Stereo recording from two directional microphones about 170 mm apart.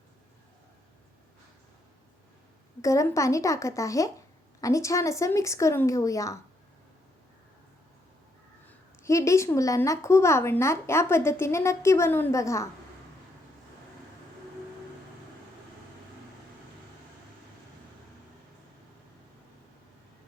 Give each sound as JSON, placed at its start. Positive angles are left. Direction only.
{"t": 2.8, "sound": "a woman's voice", "side_deg": 20}
{"t": 8.6, "sound": "a woman's voice", "side_deg": 15}